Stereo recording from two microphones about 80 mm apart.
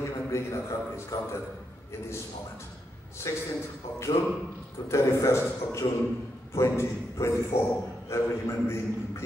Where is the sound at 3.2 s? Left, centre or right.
Left.